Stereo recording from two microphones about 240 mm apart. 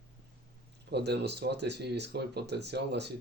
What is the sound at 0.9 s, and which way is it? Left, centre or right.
Speech, right.